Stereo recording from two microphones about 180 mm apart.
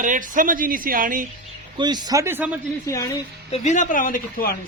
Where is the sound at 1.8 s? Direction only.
25° right (ahead or behind).